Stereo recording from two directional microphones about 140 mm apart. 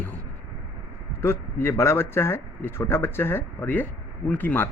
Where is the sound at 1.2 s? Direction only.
15° left (ahead or behind).